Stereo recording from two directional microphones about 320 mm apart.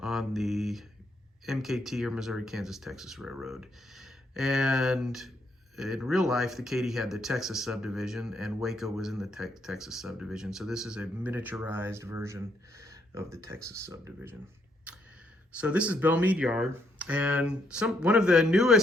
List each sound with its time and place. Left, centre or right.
0.0 s speech: centre
15.5 s speech: centre